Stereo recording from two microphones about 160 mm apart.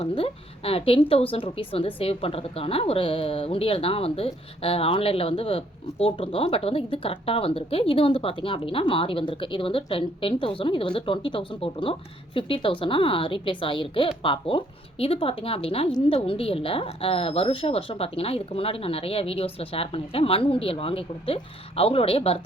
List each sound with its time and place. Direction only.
0.0 s a woman's voice: 35° left (ahead or behind)